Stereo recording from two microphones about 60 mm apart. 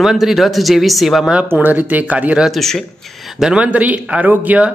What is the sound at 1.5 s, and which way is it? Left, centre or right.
Speech, right.